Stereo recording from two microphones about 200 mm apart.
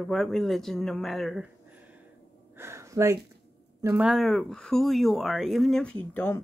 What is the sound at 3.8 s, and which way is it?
Speech, 10° right (ahead or behind).